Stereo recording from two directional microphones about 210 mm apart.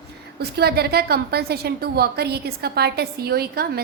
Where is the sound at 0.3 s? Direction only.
50° right (ahead or behind).